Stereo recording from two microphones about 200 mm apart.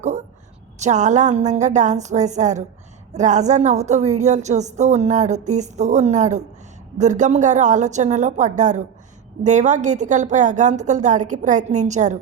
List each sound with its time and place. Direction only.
0.8 s a woman's voice: 35° right (ahead or behind)